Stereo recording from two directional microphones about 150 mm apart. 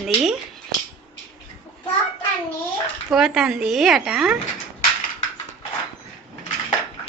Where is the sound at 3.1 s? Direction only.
5° right (ahead or behind).